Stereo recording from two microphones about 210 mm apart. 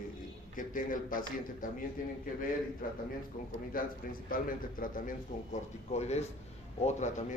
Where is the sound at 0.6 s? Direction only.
40° left (ahead or behind).